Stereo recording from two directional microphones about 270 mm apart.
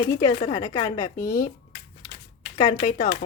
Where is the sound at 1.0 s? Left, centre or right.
Left.